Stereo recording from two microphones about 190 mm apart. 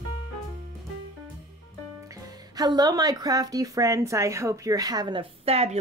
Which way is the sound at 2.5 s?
20° right (ahead or behind).